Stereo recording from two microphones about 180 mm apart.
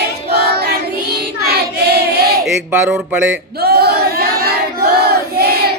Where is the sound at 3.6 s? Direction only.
60° right (ahead or behind).